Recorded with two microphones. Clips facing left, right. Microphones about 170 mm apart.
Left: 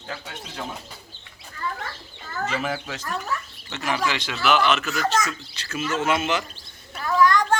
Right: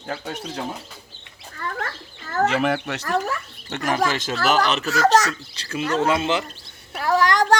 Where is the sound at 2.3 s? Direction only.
70° right (ahead or behind).